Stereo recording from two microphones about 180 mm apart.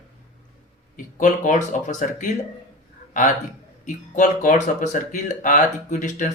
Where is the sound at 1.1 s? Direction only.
45° left (ahead or behind).